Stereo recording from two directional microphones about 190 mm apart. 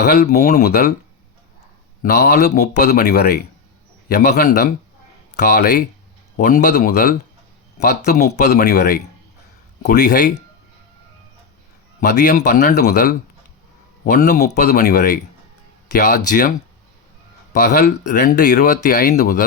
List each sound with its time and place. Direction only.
0.0 s speech: 55° left (ahead or behind)
2.0 s speech: 55° left (ahead or behind)
8.4 s speech: 55° left (ahead or behind)
11.9 s a man's voice: 45° left (ahead or behind)
12.7 s speech: 55° left (ahead or behind)
14.0 s speech: 40° left (ahead or behind)
14.5 s speech: 55° left (ahead or behind)
17.5 s speech: 45° left (ahead or behind)